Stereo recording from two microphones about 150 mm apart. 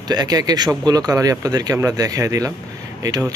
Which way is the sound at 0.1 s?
25° right (ahead or behind).